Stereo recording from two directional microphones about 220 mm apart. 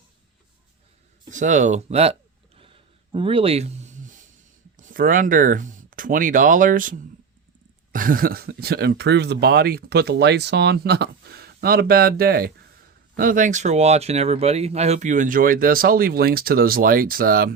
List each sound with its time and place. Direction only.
1.3 s speech: 35° right (ahead or behind)
2.6 s a sound: 25° right (ahead or behind)
4.9 s speech: 40° right (ahead or behind)